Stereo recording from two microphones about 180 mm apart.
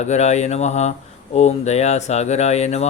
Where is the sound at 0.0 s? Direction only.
40° left (ahead or behind).